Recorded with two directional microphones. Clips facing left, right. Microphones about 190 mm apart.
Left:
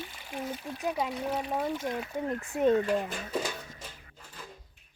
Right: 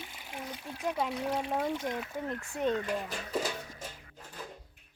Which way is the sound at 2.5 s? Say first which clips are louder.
Left 6 dB; 5° left (ahead or behind).